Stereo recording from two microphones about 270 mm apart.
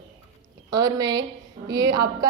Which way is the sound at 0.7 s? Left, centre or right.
Centre.